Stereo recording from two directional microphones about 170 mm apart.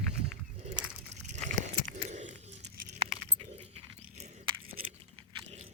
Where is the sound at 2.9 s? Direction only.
40° right (ahead or behind).